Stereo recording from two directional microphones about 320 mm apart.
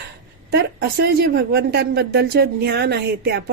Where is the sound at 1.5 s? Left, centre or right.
Right.